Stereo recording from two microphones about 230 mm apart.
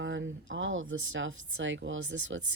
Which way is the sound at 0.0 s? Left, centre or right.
Right.